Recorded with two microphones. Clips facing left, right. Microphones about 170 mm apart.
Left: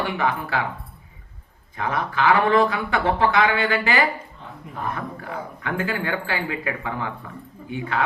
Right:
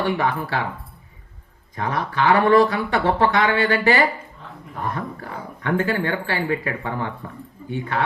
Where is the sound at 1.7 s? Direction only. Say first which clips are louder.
Right 1 dB; 35° right (ahead or behind).